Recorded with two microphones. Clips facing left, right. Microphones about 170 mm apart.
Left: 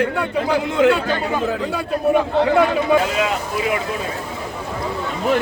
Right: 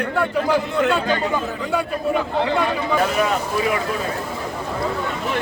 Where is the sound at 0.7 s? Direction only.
90° left.